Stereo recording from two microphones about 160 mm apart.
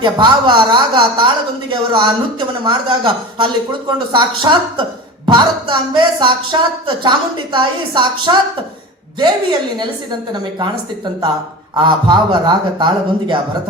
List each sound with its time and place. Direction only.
0.0 s speech: 30° right (ahead or behind)
11.7 s speech: 25° right (ahead or behind)